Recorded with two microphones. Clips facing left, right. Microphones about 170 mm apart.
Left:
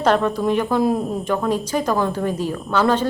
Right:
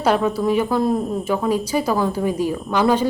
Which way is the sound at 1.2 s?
10° right (ahead or behind).